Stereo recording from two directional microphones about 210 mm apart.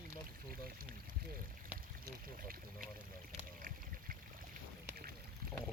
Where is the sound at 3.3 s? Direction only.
40° right (ahead or behind).